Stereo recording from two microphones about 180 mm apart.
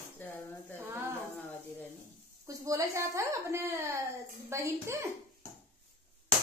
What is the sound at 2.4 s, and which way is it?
A woman's voice, 15° right (ahead or behind).